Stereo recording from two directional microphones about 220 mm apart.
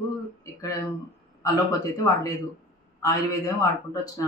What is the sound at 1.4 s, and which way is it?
Speech, 15° left (ahead or behind).